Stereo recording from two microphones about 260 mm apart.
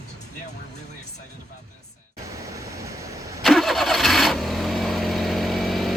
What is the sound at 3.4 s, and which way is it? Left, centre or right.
Vehicle, centre.